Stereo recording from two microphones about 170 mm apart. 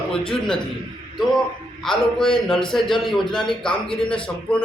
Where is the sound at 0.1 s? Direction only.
5° left (ahead or behind).